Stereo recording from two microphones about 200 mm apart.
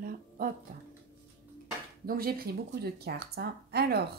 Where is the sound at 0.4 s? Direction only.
45° right (ahead or behind).